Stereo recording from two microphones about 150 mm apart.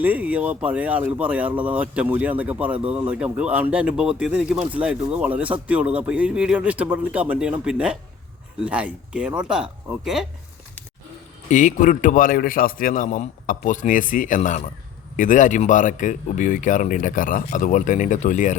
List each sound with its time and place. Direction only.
0.0 s speech: 10° right (ahead or behind)
11.4 s speech: 55° left (ahead or behind)